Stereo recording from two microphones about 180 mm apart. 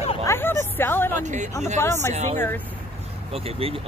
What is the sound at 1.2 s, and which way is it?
Speech, 40° right (ahead or behind).